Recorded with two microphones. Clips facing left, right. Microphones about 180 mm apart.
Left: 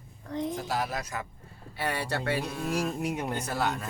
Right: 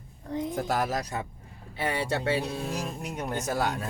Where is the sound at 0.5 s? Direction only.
50° right (ahead or behind); by 1.2 s 35° right (ahead or behind).